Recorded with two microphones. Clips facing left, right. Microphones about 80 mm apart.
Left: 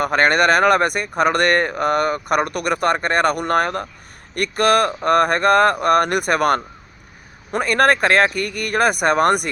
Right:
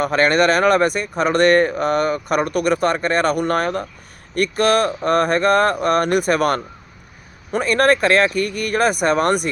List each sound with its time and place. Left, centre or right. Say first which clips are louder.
0.0 s speech: even; left
8.3 s speech: right 3 dB; right
8.7 s speech: left 1 dB; left